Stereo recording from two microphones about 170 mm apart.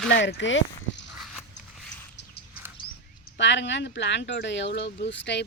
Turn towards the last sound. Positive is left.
turn(degrees=90)